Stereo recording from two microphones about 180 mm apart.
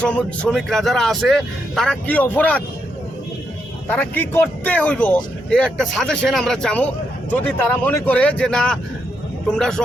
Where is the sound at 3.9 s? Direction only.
10° left (ahead or behind).